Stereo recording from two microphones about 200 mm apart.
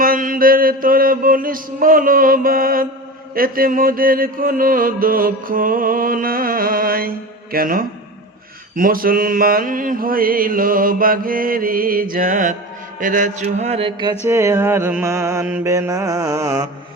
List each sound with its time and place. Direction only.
0.0 s mantra: 45° right (ahead or behind); by 14.2 s 25° right (ahead or behind)
14.3 s mantra: 15° right (ahead or behind)